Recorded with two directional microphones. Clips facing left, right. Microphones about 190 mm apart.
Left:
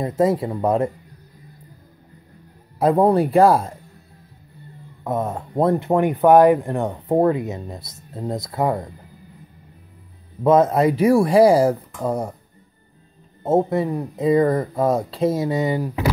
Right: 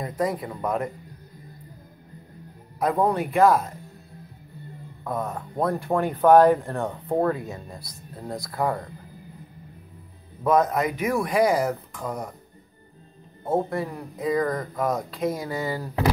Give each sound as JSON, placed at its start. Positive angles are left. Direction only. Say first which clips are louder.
{"t": 0.0, "sound": "speech", "louder": "left 8 dB", "side_deg": 25}
{"t": 2.8, "sound": "speech", "louder": "left 7 dB", "side_deg": 30}
{"t": 5.0, "sound": "speech", "louder": "left 5 dB", "side_deg": 25}
{"t": 10.4, "sound": "speech", "louder": "left 6 dB", "side_deg": 25}
{"t": 13.4, "sound": "speech", "louder": "left 6 dB", "side_deg": 20}